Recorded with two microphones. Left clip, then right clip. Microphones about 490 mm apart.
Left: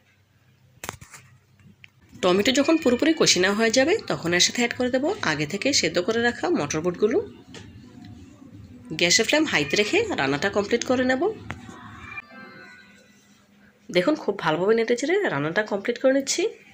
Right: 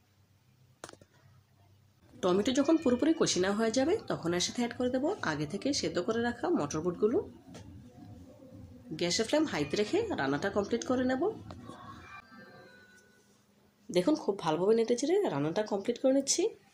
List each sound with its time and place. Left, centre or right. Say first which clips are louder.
2.2 s speech: left 8 dB; left
9.0 s speech: left 10 dB; left
13.9 s speech: left 7 dB; left